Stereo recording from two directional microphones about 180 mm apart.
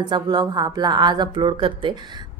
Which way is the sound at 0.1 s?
25° right (ahead or behind).